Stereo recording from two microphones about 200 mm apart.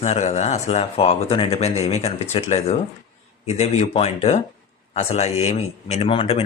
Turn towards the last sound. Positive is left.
turn(degrees=30)  # may be behind; listen again after turning